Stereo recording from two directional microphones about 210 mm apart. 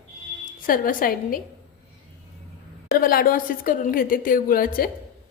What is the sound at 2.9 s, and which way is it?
A woman's voice, 45° left (ahead or behind).